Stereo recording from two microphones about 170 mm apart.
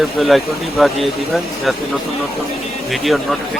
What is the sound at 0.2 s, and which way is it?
Speech, centre (ahead or behind).